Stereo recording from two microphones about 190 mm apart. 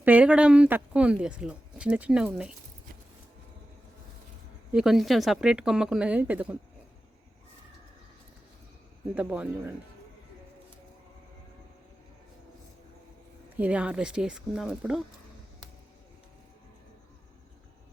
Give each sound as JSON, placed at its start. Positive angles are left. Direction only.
{"t": 0.0, "sound": "speech", "side_deg": -10}
{"t": 4.7, "sound": "speech", "side_deg": -5}
{"t": 9.1, "sound": "speech", "side_deg": -10}
{"t": 13.6, "sound": "speech", "side_deg": -5}